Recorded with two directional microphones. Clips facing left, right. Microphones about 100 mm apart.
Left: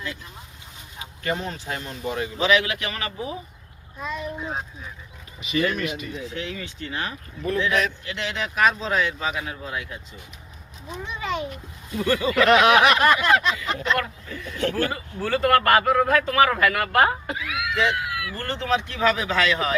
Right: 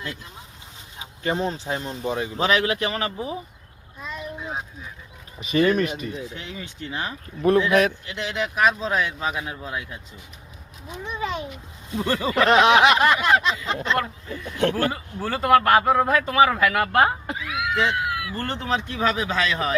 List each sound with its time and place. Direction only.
1.2 s a sound: 25° right (ahead or behind)
2.4 s speech: 40° right (ahead or behind)
4.0 s a child's voice: centre (ahead or behind)
5.4 s speech: 35° right (ahead or behind)
6.3 s speech: 10° right (ahead or behind)
7.7 s speech: 50° right (ahead or behind)
8.0 s speech: 10° right (ahead or behind)
11.9 s a sound: 30° right (ahead or behind)
14.6 s speech: 50° right (ahead or behind)
15.2 s speech: 10° right (ahead or behind)
15.8 s speech: 15° right (ahead or behind)
17.5 s a sound: 30° right (ahead or behind)